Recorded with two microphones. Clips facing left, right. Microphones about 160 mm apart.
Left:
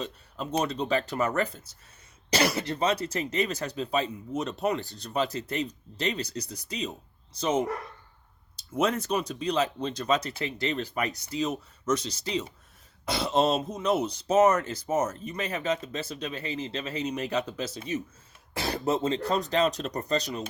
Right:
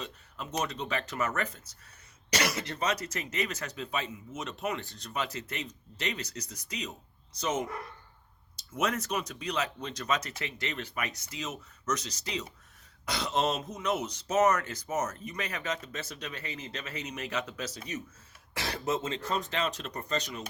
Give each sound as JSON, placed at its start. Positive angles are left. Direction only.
{"t": 0.0, "sound": "speech", "side_deg": 35}
{"t": 8.7, "sound": "speech", "side_deg": 30}